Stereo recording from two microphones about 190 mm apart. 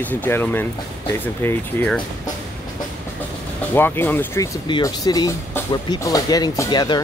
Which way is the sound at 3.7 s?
10° left (ahead or behind).